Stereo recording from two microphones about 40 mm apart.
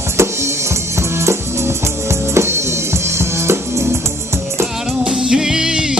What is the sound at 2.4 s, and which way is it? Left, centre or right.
Music, right.